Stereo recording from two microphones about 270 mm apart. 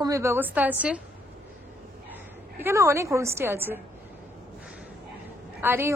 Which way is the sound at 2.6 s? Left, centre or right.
Centre.